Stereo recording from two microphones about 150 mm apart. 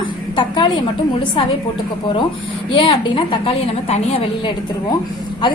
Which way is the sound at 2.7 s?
35° left (ahead or behind).